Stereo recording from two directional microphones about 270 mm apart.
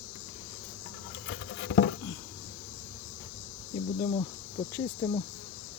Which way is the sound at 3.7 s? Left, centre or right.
Centre.